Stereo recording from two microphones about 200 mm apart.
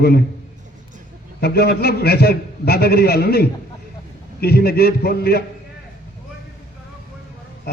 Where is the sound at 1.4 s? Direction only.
50° left (ahead or behind).